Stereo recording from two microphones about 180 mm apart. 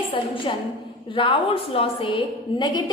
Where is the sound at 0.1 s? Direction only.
30° left (ahead or behind).